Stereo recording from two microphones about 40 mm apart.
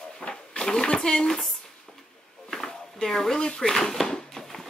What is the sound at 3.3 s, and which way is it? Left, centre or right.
Speech, left.